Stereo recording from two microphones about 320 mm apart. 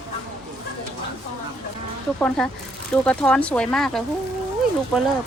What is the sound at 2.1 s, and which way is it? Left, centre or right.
Speech, centre.